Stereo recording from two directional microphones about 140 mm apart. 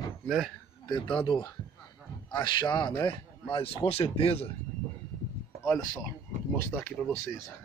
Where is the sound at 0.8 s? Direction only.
35° left (ahead or behind).